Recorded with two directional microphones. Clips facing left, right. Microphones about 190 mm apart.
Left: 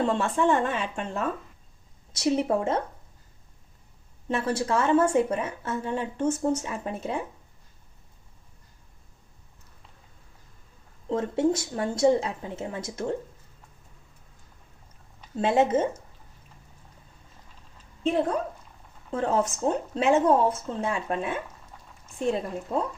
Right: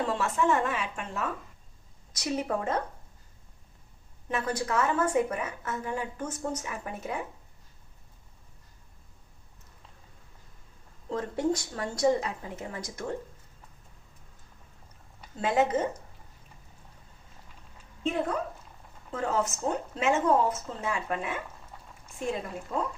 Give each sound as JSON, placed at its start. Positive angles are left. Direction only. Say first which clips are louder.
{"t": 0.1, "sound": "a woman's voice", "louder": "left 3 dB", "side_deg": 30}
{"t": 4.3, "sound": "a woman's voice", "louder": "left 4 dB", "side_deg": 30}
{"t": 11.1, "sound": "a woman's voice", "louder": "left 4 dB", "side_deg": 25}
{"t": 15.4, "sound": "a woman's voice", "louder": "left 4 dB", "side_deg": 25}
{"t": 18.0, "sound": "speech", "louder": "left 4 dB", "side_deg": 30}